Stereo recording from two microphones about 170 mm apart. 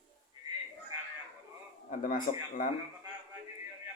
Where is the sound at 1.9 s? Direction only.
55° left (ahead or behind).